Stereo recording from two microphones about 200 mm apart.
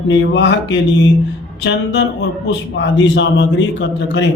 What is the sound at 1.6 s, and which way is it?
Speech, 60° left (ahead or behind).